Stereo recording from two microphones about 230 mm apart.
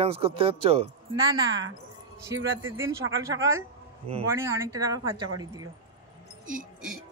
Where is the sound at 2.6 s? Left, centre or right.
Centre.